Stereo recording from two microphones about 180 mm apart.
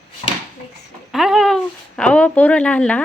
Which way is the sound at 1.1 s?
Centre (ahead or behind).